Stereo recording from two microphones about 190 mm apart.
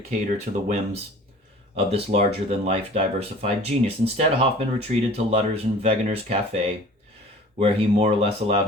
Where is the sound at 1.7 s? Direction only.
30° right (ahead or behind).